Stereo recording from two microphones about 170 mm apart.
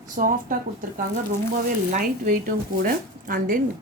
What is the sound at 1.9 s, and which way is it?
Speech, 50° right (ahead or behind).